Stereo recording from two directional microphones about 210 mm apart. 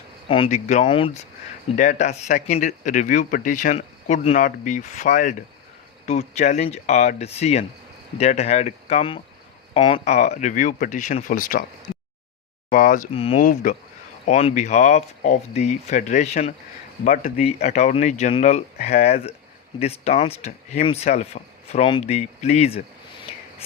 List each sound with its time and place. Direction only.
0.3 s speech: 30° left (ahead or behind)
1.7 s speech: 40° left (ahead or behind)
12.7 s speech: 40° left (ahead or behind)
13.1 s speech: 25° left (ahead or behind)
13.4 s speech: 40° left (ahead or behind)